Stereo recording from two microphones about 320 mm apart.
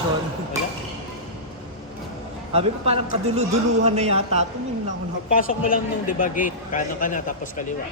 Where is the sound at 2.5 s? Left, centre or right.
Centre.